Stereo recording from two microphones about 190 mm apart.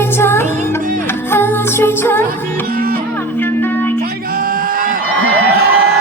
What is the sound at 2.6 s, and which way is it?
Music, 50° right (ahead or behind).